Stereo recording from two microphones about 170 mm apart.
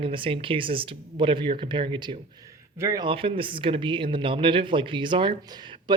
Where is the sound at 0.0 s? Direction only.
30° right (ahead or behind).